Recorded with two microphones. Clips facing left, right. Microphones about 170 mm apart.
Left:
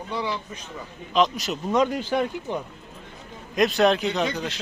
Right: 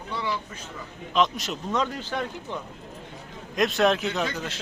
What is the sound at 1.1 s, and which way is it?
Speech, centre (ahead or behind).